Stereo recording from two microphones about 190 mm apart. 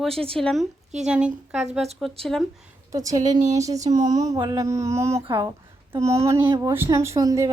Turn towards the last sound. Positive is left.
turn(degrees=-15)  # may be behind; listen again after turning